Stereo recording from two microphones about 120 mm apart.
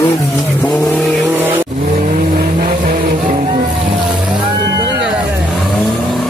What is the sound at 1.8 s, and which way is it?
Vehicle, 70° right (ahead or behind).